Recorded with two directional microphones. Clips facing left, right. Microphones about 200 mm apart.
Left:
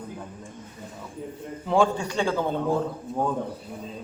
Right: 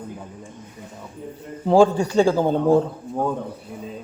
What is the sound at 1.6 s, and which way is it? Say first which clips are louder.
A man's voice: right 7 dB; 35° right (ahead or behind).